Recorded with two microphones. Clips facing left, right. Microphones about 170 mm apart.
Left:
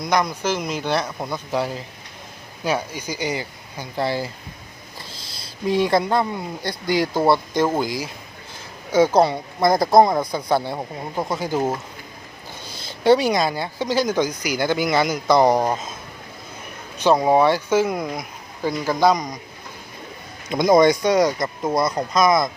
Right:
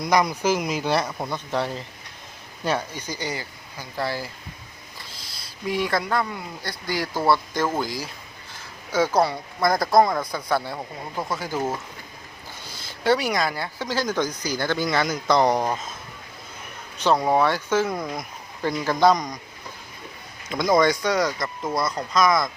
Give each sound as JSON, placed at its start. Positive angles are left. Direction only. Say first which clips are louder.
{"t": 0.0, "sound": "speech", "louder": "even", "side_deg": -5}
{"t": 5.6, "sound": "speech", "louder": "left 6 dB", "side_deg": 25}
{"t": 12.7, "sound": "speech", "louder": "left 6 dB", "side_deg": 20}
{"t": 17.0, "sound": "speech", "louder": "left 4 dB", "side_deg": 15}
{"t": 20.5, "sound": "speech", "louder": "left 5 dB", "side_deg": 20}